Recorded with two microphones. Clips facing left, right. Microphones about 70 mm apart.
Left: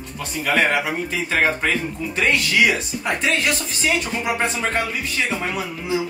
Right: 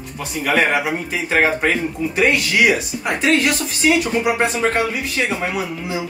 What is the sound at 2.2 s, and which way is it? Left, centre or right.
Speech, centre.